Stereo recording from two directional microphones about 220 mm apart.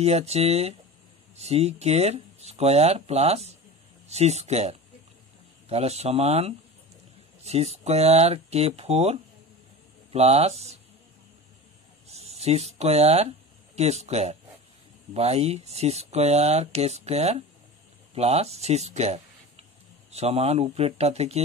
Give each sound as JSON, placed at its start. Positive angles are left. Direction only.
{"t": 0.0, "sound": "speech", "side_deg": -30}
{"t": 12.1, "sound": "speech", "side_deg": -30}